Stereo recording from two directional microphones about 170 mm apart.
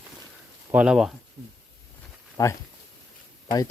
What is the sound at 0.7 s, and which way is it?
Speech, 5° right (ahead or behind).